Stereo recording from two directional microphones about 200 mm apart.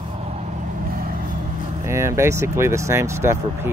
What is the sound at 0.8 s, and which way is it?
Vehicle, 45° right (ahead or behind).